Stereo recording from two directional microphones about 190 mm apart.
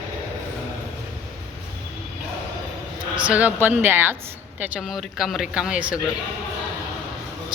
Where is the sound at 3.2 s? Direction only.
5° right (ahead or behind).